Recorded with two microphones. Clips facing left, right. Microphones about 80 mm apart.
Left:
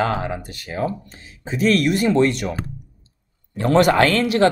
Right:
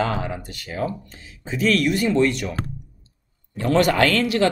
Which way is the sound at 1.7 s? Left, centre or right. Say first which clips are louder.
Left 2 dB; left.